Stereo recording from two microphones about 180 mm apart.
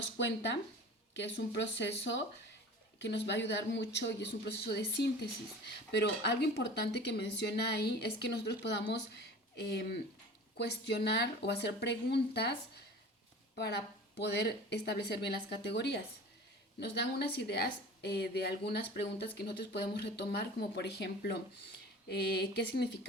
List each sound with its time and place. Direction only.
0.0 s speech: 75° left (ahead or behind)
13.6 s a woman's voice: 65° left (ahead or behind)